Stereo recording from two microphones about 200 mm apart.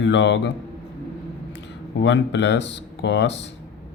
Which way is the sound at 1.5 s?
60° left (ahead or behind).